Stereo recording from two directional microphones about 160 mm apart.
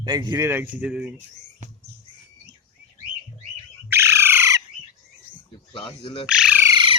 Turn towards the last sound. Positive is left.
turn(degrees=-30)  # may be behind; listen again after turning